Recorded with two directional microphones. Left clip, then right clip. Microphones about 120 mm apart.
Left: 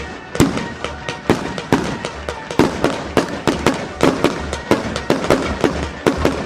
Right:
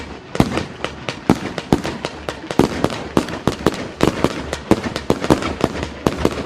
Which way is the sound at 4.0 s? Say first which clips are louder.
Left 2 dB; 20° left (ahead or behind).